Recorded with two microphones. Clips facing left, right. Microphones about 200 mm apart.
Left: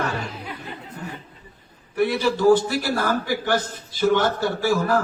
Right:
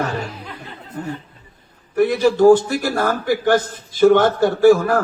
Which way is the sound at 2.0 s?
50° right (ahead or behind).